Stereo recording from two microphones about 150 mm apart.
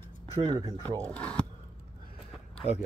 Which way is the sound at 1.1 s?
10° left (ahead or behind).